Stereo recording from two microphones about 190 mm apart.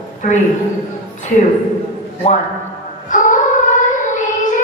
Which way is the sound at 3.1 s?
45° left (ahead or behind).